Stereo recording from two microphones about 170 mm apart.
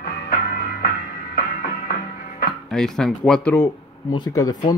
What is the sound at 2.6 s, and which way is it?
Speech, 5° left (ahead or behind).